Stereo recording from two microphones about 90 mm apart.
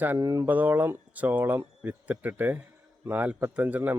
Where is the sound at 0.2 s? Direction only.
40° right (ahead or behind).